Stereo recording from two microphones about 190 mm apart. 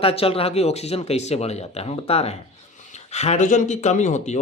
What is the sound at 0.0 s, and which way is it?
Speech, 30° left (ahead or behind).